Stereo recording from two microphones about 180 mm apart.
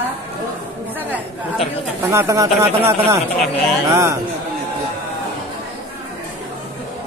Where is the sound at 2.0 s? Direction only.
15° right (ahead or behind).